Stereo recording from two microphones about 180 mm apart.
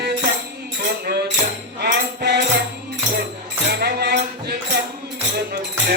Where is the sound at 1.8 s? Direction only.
65° right (ahead or behind).